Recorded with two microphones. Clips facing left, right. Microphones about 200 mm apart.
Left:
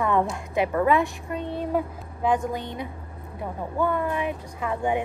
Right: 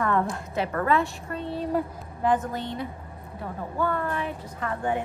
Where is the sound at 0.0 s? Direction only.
15° left (ahead or behind).